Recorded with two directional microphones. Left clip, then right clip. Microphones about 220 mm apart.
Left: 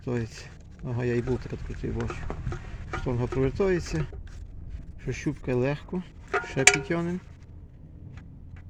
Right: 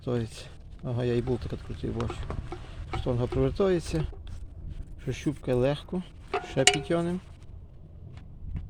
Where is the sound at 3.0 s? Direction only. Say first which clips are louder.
Even; 15° right (ahead or behind).